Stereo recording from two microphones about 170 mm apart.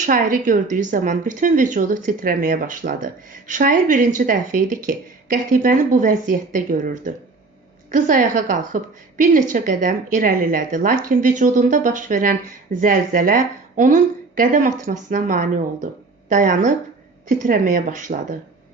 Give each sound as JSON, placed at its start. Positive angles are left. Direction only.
{"t": 0.0, "sound": "speech", "side_deg": -50}